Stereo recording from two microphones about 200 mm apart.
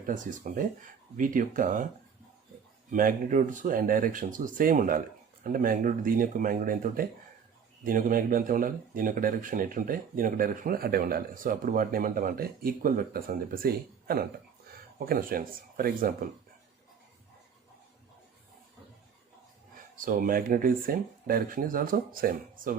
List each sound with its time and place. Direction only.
0.0 s speech: 40° right (ahead or behind)
2.9 s speech: 40° right (ahead or behind)
20.0 s speech: 45° right (ahead or behind)